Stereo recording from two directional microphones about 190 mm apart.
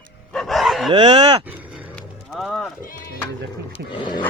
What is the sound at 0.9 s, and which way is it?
Speech, 25° right (ahead or behind).